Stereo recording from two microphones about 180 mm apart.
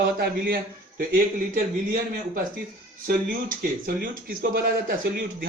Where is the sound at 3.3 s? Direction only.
50° right (ahead or behind).